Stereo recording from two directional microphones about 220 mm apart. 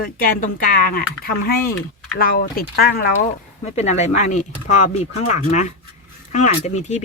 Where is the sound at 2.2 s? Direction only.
40° left (ahead or behind).